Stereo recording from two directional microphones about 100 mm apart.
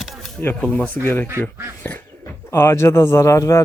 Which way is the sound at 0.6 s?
15° left (ahead or behind).